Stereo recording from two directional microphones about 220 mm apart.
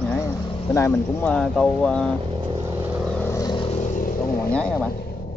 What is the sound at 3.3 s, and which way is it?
Vehicle, 15° left (ahead or behind).